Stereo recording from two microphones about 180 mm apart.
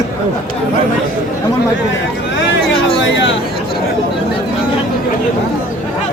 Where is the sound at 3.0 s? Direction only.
90° left.